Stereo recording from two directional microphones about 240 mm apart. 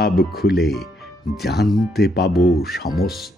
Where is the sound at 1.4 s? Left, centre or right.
Left.